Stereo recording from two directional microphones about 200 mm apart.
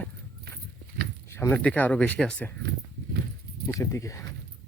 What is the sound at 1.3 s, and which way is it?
Speech, 10° left (ahead or behind).